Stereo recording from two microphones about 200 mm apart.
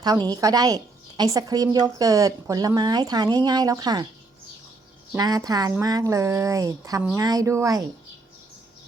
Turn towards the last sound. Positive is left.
turn(degrees=-15)  # may be behind; listen again after turning